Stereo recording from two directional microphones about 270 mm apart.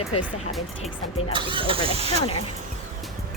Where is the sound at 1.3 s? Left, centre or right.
Centre.